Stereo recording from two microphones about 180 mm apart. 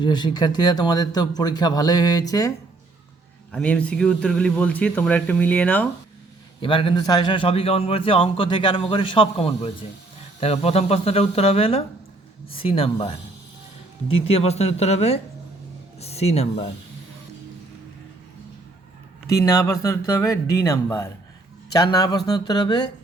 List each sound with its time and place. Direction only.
0.0 s a man's voice: 25° left (ahead or behind)
3.5 s speech: 5° left (ahead or behind)
6.6 s a man's voice: 30° left (ahead or behind)
14.1 s speech: 35° left (ahead or behind)
19.4 s a man's voice: 15° left (ahead or behind)